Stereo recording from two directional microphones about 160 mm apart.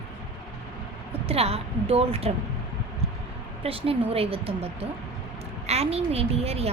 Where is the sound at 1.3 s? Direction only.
40° right (ahead or behind).